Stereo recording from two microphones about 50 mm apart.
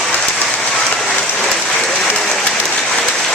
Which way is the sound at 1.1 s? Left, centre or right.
Centre.